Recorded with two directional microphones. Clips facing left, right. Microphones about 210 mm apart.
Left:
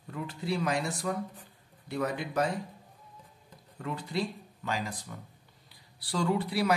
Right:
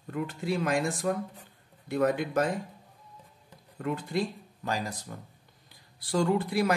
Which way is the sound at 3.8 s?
50° right (ahead or behind).